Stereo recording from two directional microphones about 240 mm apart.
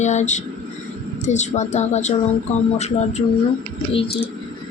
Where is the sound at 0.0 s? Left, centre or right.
Left.